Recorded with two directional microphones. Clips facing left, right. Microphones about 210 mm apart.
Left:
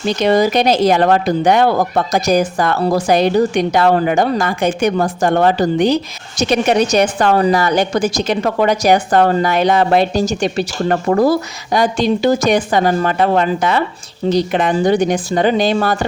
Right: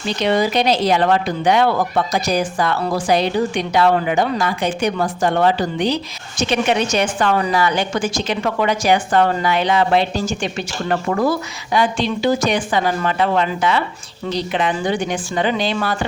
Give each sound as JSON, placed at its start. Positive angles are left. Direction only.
{"t": 0.2, "sound": "speech", "side_deg": 45}